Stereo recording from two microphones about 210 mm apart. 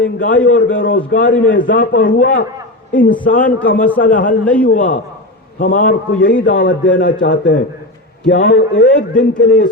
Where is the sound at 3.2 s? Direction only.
40° left (ahead or behind).